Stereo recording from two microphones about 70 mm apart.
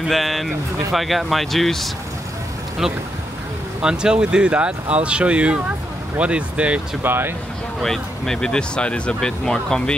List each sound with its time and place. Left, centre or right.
0.1 s speech: centre
7.0 s speech: right
7.8 s speech: centre